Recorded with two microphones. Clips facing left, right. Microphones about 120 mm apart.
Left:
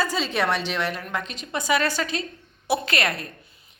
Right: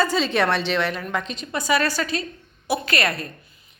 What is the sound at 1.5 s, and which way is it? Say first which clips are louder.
A woman's voice: right 1 dB; 15° left (ahead or behind).